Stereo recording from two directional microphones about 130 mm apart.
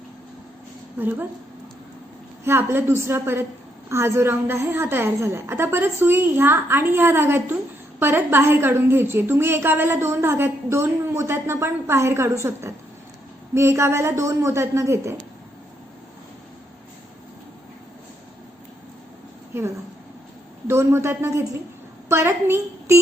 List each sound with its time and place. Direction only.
0.9 s a woman's voice: 15° right (ahead or behind)
2.4 s a woman's voice: 20° right (ahead or behind)
20.7 s a woman's voice: 20° right (ahead or behind)